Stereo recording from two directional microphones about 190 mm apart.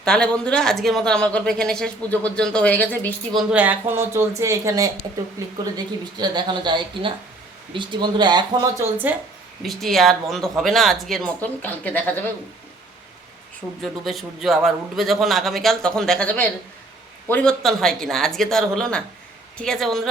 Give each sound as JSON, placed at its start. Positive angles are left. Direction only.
{"t": 0.0, "sound": "speech", "side_deg": 5}
{"t": 3.5, "sound": "speech", "side_deg": -10}
{"t": 9.6, "sound": "speech", "side_deg": 0}
{"t": 13.8, "sound": "speech", "side_deg": 0}